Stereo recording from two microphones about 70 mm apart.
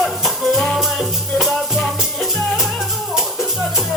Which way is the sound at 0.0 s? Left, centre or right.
Centre.